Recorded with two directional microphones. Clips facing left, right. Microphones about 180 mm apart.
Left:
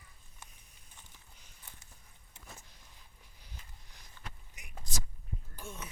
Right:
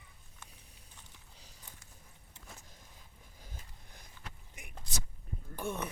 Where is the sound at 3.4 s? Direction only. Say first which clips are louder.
Right 3 dB; 50° right (ahead or behind).